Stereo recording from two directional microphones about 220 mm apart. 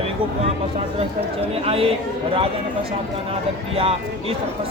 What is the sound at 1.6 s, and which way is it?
Speech, 25° right (ahead or behind).